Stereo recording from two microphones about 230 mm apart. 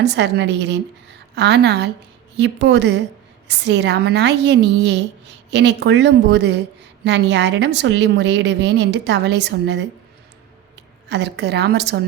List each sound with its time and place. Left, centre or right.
0.0 s a woman's voice: right
11.1 s a woman's voice: right